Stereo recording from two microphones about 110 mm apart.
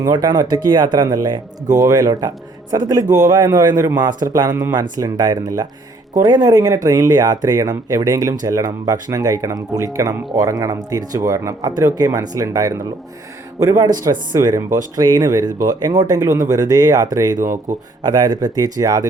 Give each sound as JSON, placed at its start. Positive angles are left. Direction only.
{"t": 0.0, "sound": "speech", "side_deg": -35}